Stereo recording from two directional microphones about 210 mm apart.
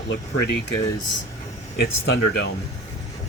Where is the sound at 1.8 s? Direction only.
55° left (ahead or behind).